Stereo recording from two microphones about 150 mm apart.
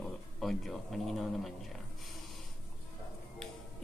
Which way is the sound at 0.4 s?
Centre (ahead or behind).